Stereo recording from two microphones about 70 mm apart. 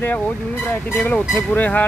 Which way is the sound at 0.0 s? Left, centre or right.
Left.